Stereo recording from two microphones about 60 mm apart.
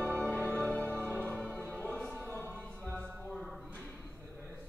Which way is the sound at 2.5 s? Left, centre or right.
Left.